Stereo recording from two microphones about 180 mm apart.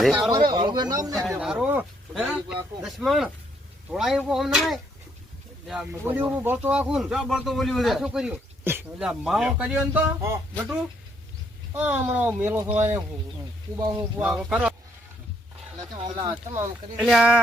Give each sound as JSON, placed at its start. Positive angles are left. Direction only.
{"t": 0.0, "sound": "speech", "side_deg": 0}
{"t": 0.5, "sound": "speech", "side_deg": -25}
{"t": 1.4, "sound": "a sound", "side_deg": -5}
{"t": 2.5, "sound": "speech", "side_deg": 0}
{"t": 11.7, "sound": "speech", "side_deg": -10}
{"t": 16.0, "sound": "speech", "side_deg": -20}
{"t": 17.0, "sound": "speech", "side_deg": -5}